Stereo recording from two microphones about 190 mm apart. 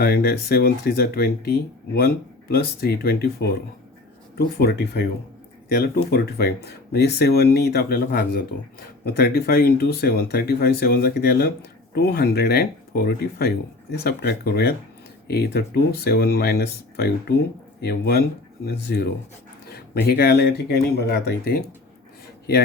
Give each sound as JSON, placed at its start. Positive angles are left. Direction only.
{"t": 0.0, "sound": "speech", "side_deg": 55}